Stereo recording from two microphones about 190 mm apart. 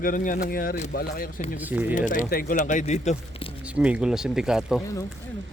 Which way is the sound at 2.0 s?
40° left (ahead or behind).